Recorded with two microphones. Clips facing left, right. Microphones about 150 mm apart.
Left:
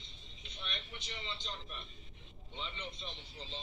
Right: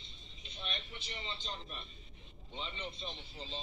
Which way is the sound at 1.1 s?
20° right (ahead or behind).